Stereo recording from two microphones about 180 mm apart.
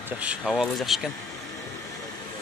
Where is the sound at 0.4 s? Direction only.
5° left (ahead or behind).